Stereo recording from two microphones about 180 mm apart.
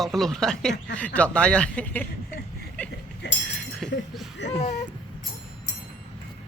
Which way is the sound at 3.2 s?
75° left (ahead or behind).